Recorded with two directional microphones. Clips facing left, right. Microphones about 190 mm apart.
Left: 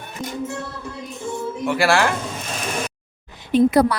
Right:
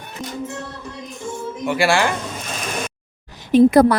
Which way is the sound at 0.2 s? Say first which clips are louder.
Left 1 dB; 10° right (ahead or behind).